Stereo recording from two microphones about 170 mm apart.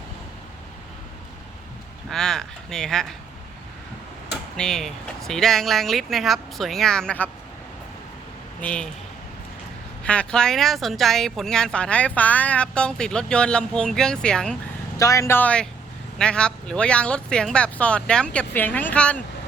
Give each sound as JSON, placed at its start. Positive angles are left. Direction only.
{"t": 2.0, "sound": "speech", "side_deg": 5}
{"t": 4.5, "sound": "speech", "side_deg": 5}
{"t": 8.6, "sound": "speech", "side_deg": 5}
{"t": 10.0, "sound": "speech", "side_deg": 5}
{"t": 14.9, "sound": "speech", "side_deg": 20}